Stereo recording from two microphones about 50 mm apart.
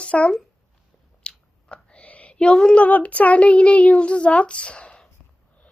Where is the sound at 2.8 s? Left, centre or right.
Left.